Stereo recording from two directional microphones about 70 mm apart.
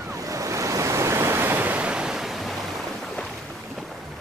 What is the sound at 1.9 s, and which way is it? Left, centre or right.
Waves, centre.